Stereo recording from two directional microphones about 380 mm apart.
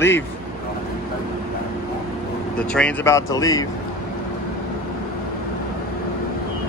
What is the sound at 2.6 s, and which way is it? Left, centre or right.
Speech, centre.